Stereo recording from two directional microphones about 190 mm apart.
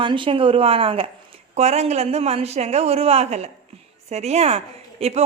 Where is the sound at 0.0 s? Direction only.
25° right (ahead or behind).